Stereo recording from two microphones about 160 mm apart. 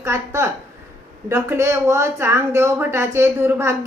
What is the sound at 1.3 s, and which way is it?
A woman's voice, 15° right (ahead or behind).